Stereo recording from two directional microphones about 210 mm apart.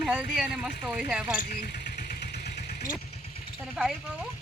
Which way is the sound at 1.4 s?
40° left (ahead or behind).